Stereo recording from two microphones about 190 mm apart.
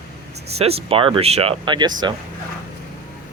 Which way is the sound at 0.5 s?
30° right (ahead or behind).